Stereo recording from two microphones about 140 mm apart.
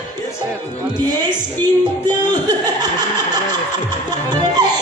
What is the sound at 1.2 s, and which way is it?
Chuckle, 30° right (ahead or behind).